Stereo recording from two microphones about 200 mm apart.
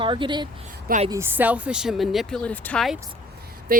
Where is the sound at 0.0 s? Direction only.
25° right (ahead or behind).